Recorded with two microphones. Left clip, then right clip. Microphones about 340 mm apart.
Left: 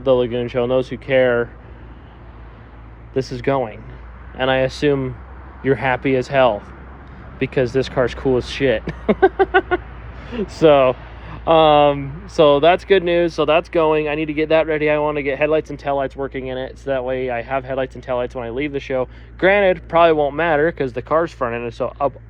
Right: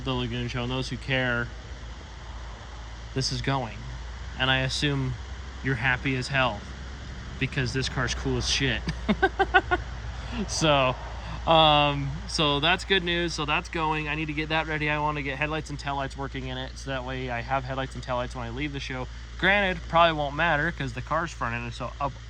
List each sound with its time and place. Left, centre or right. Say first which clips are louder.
0.0 s speech: left 15 dB; centre
3.2 s speech: left 10 dB; centre